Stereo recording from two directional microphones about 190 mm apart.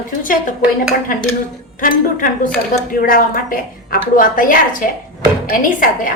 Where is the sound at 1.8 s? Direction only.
45° left (ahead or behind).